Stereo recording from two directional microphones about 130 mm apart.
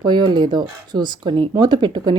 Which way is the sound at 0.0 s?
35° right (ahead or behind).